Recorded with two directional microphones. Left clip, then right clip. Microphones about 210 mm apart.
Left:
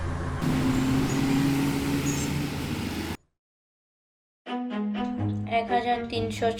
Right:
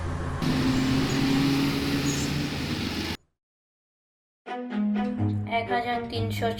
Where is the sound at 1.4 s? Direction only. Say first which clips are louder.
Right 1 dB; 20° left (ahead or behind).